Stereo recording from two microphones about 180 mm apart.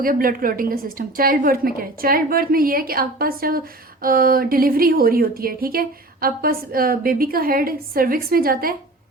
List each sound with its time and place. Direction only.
0.0 s speech: 50° right (ahead or behind)